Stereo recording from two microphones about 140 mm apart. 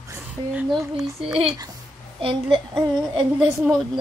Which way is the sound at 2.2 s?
40° right (ahead or behind).